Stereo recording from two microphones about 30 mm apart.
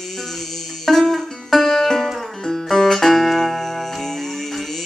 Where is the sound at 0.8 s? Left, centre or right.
Centre.